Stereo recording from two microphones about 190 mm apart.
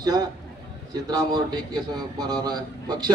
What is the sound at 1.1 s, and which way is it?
A man's voice, 20° right (ahead or behind).